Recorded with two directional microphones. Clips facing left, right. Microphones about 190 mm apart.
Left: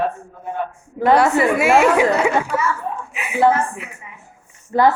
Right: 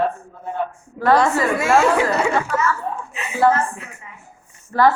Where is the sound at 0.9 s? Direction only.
15° left (ahead or behind).